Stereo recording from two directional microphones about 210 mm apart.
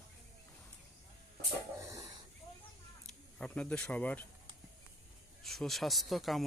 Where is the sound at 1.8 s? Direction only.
15° right (ahead or behind).